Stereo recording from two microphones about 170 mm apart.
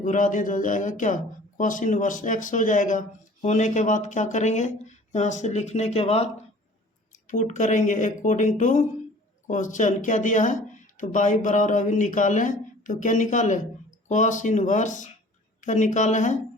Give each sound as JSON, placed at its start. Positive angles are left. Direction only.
{"t": 0.0, "sound": "speech", "side_deg": 50}
{"t": 7.1, "sound": "speech", "side_deg": 50}